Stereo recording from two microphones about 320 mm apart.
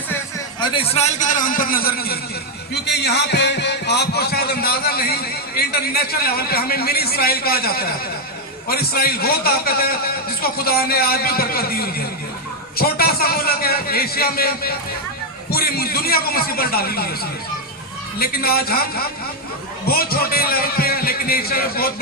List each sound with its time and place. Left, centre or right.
0.1 s a man's voice: centre
18.2 s a man's voice: left